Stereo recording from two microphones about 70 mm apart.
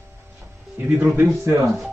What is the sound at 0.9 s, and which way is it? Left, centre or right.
Speech, right.